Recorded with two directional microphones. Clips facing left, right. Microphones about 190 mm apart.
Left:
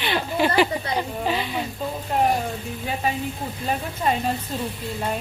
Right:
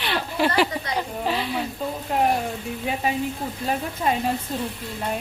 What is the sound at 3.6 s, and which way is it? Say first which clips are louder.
Speech: even; 5° right (ahead or behind).